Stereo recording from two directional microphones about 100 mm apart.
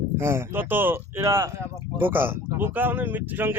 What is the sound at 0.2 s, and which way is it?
Speech, 25° right (ahead or behind).